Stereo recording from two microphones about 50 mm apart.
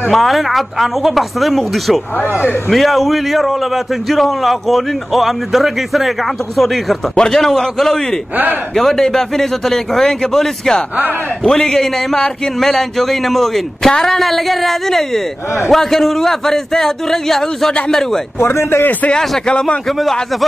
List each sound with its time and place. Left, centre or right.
0.1 s a man's voice: centre
18.4 s speech: left
19.1 s a man's voice: centre
20.0 s a man's voice: centre